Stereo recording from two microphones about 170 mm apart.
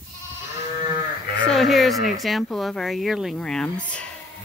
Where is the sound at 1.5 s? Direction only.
Centre (ahead or behind).